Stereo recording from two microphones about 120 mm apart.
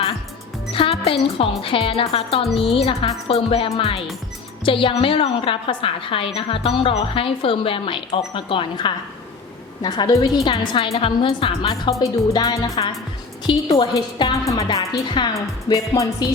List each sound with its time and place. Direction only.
0.7 s a woman's voice: 50° left (ahead or behind); by 10.5 s 30° left (ahead or behind)
10.5 s a woman's voice: 45° left (ahead or behind)
11.7 s a woman's voice: 30° left (ahead or behind)